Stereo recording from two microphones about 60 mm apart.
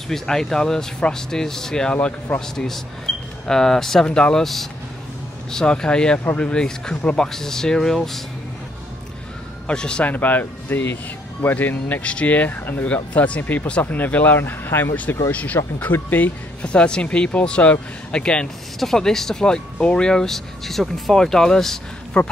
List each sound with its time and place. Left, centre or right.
0.1 s speech: centre
9.7 s speech: centre
10.0 s speech: left
15.3 s speech: left
16.6 s speech: centre